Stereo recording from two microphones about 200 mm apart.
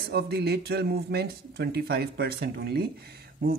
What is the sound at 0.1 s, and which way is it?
Mantra, 55° right (ahead or behind).